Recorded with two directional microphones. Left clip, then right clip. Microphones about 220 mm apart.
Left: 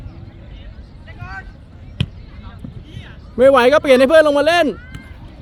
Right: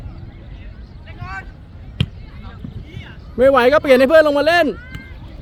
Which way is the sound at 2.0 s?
Centre (ahead or behind).